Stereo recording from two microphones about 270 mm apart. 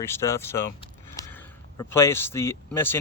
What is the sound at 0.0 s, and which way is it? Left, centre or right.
Speech, centre.